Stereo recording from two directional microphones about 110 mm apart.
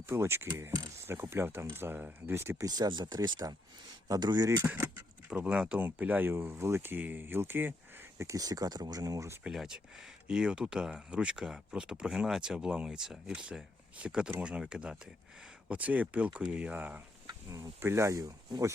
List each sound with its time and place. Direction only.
0.0 s speech: 25° right (ahead or behind)
2.6 s speech: 35° right (ahead or behind)
4.6 s speech: 15° right (ahead or behind)
8.2 s speech: 30° right (ahead or behind)
9.4 s speech: 5° right (ahead or behind)
17.2 s speech: 30° right (ahead or behind)